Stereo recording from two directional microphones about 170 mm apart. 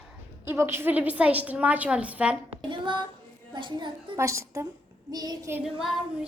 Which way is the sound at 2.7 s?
30° right (ahead or behind).